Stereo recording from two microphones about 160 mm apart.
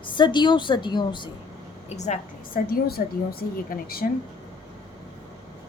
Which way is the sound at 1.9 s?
45° left (ahead or behind).